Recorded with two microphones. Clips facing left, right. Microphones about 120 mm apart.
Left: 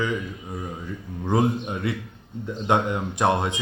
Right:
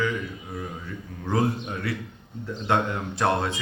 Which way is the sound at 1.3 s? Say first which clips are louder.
Left 3 dB; 20° left (ahead or behind).